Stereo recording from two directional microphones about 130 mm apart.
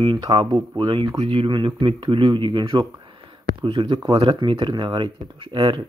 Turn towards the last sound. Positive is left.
turn(degrees=-40)  # may be behind; listen again after turning